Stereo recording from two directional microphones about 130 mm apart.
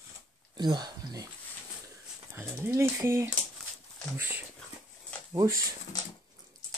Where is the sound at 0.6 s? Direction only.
35° right (ahead or behind).